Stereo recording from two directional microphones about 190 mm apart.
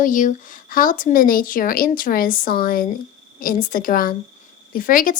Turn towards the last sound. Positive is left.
turn(degrees=50)  # may be behind; listen again after turning